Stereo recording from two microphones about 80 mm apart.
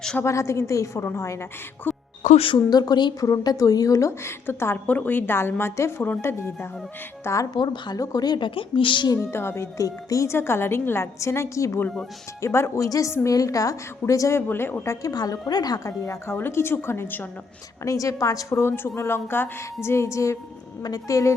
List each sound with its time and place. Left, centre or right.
0.3 s a woman's voice: left
1.9 s music: left
2.6 s a woman's voice: left
4.2 s a woman's voice: left
7.5 s speech: left
8.0 s speech: left
9.1 s a woman's voice: left
9.8 s a woman's voice: left
10.3 s a woman's voice: left
14.3 s a woman's voice: left
15.0 s a woman's voice: left
16.3 s a woman's voice: left
17.8 s a woman's voice: left
18.5 s a woman's voice: left